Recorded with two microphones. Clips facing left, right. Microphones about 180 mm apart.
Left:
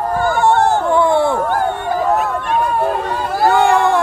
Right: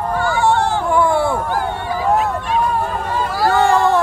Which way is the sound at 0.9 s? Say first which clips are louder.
Left 2 dB; 25° left (ahead or behind).